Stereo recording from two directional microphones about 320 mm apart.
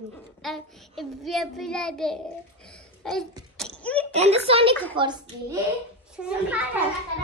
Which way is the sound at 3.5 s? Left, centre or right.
Centre.